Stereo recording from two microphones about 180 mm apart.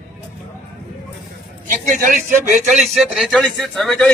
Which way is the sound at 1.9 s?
45° right (ahead or behind).